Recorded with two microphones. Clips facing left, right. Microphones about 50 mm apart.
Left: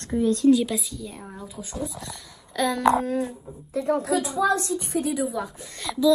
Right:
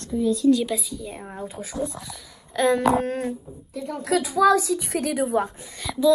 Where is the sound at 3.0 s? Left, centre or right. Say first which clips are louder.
Even; right.